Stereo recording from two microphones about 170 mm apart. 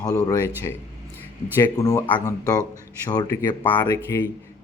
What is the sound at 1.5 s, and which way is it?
Speech, 15° left (ahead or behind).